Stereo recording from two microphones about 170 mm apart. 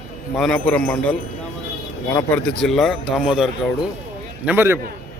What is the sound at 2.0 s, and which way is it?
Speech, 15° left (ahead or behind).